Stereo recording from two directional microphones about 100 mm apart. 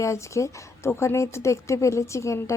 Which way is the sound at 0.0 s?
30° left (ahead or behind).